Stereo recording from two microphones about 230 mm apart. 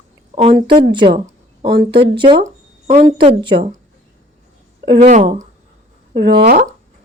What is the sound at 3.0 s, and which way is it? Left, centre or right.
Speech, right.